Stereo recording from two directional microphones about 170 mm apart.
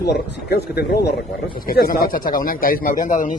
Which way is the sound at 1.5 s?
60° left (ahead or behind).